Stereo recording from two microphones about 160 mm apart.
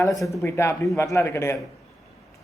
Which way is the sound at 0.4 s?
15° left (ahead or behind).